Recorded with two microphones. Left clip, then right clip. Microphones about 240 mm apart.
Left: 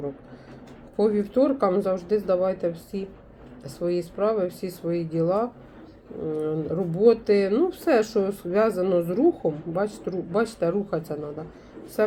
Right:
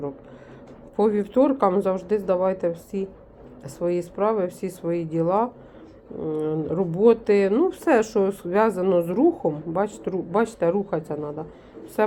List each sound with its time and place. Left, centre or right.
0.9 s speech: centre